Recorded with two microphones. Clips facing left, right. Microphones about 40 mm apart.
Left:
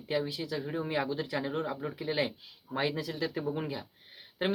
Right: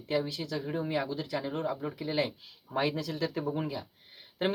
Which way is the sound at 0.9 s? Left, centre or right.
Centre.